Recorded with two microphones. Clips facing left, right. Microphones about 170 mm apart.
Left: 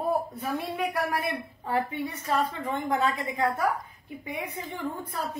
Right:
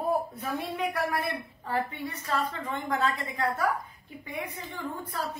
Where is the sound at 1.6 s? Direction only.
20° left (ahead or behind).